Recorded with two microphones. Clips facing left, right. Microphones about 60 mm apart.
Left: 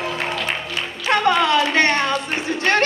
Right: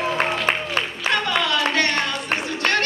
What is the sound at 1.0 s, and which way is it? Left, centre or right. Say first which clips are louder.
Clapping: left 6 dB; left.